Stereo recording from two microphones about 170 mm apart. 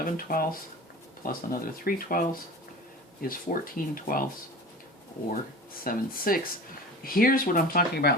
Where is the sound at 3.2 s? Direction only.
55° left (ahead or behind).